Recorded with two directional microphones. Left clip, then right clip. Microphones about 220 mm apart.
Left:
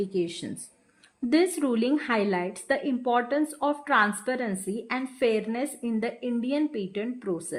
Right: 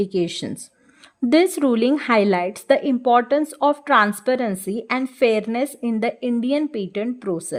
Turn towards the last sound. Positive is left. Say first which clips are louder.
# right 6 dB
turn(degrees=-50)  # may be behind; listen again after turning